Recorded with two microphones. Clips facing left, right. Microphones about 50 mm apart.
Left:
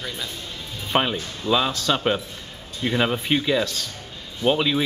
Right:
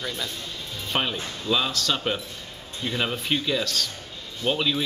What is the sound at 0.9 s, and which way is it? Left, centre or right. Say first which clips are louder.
Speech: left 5 dB; centre.